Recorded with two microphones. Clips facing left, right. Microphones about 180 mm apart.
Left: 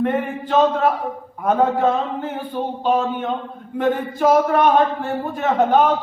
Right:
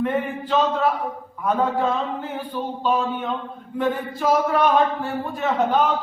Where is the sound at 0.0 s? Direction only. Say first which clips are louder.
Left 2 dB; 50° left (ahead or behind).